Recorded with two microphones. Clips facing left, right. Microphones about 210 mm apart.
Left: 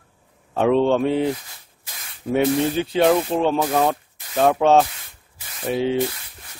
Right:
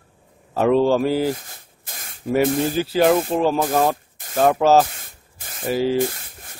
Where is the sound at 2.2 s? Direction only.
5° right (ahead or behind).